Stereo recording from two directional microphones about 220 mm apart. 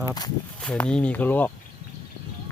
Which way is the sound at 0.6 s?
5° left (ahead or behind).